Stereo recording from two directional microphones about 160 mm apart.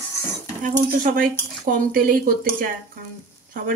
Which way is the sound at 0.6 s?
55° right (ahead or behind).